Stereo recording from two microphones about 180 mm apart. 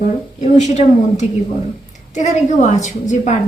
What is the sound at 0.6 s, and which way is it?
A woman's voice, 40° left (ahead or behind).